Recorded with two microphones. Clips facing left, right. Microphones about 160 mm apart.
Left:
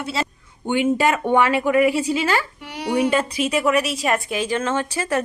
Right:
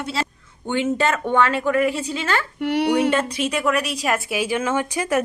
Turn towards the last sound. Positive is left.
turn(degrees=-15)  # may be behind; listen again after turning